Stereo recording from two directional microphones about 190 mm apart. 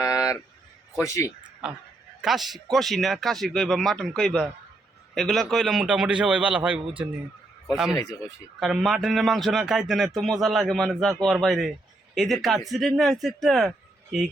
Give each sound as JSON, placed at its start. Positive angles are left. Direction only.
{"t": 0.0, "sound": "a sound", "side_deg": 20}
{"t": 0.9, "sound": "a man's voice", "side_deg": 15}
{"t": 1.6, "sound": "a man's voice", "side_deg": -5}
{"t": 8.5, "sound": "a man's voice", "side_deg": 0}